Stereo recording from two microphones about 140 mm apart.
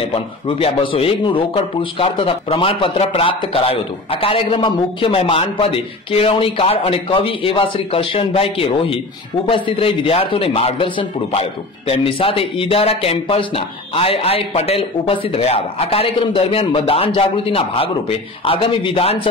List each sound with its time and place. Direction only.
0.0 s speech: 40° left (ahead or behind)